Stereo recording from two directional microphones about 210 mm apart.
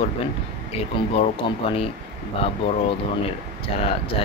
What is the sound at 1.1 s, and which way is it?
Speech, 25° left (ahead or behind).